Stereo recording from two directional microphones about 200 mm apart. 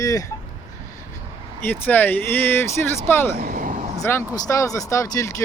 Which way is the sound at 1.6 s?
10° left (ahead or behind).